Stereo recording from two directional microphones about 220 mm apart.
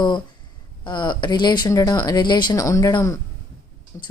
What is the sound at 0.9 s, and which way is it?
Speech, 20° left (ahead or behind).